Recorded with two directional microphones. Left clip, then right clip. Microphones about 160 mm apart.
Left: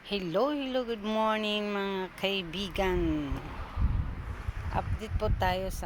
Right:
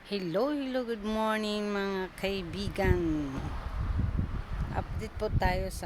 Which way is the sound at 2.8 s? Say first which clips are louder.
Even; 10° right (ahead or behind).